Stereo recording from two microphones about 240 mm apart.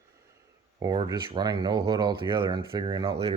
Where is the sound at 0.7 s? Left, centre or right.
Centre.